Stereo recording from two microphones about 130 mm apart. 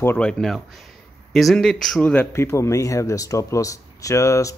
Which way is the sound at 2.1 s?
20° left (ahead or behind).